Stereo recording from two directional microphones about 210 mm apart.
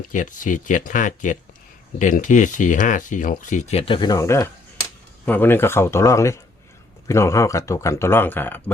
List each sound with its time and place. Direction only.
0.1 s speech: 40° left (ahead or behind); by 8.7 s 10° left (ahead or behind)